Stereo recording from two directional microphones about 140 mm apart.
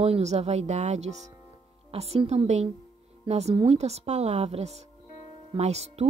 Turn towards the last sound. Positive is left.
turn(degrees=-50)  # may be behind; listen again after turning